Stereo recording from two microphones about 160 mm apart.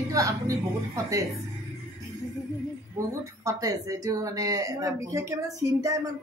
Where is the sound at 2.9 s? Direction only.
20° right (ahead or behind).